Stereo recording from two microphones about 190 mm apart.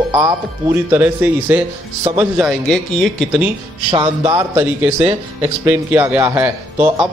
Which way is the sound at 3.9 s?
30° right (ahead or behind).